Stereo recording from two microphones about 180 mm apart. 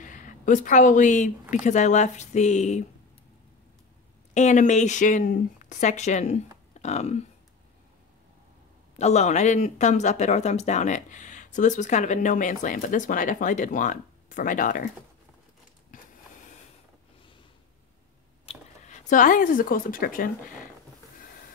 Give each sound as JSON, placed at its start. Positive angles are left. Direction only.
{"t": 0.0, "sound": "speech", "side_deg": 45}
{"t": 4.3, "sound": "speech", "side_deg": 40}
{"t": 8.9, "sound": "speech", "side_deg": 40}
{"t": 15.9, "sound": "a sound", "side_deg": 50}
{"t": 18.4, "sound": "a sound", "side_deg": 30}
{"t": 19.0, "sound": "speech", "side_deg": 45}